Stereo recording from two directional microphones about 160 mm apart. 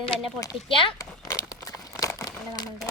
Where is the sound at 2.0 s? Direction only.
20° left (ahead or behind).